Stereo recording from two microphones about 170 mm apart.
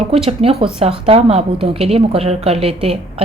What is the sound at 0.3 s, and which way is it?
A woman's voice, 35° right (ahead or behind).